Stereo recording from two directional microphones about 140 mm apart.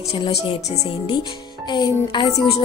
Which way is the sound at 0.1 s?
40° left (ahead or behind).